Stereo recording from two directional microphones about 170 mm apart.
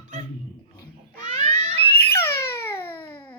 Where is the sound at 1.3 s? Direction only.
40° right (ahead or behind).